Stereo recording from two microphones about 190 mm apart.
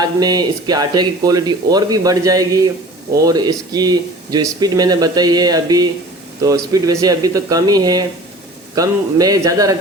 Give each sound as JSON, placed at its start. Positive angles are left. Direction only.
{"t": 0.0, "sound": "speech", "side_deg": -20}